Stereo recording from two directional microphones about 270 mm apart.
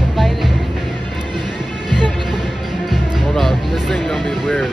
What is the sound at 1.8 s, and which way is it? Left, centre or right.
Music, centre.